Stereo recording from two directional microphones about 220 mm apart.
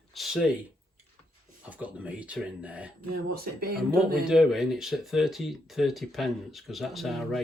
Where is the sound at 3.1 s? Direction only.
45° right (ahead or behind).